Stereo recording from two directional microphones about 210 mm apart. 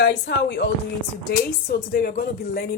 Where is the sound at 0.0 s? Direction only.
50° left (ahead or behind).